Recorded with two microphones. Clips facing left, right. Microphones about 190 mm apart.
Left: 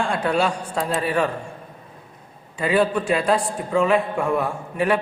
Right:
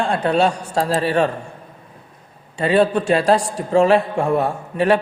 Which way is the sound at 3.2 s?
75° right (ahead or behind).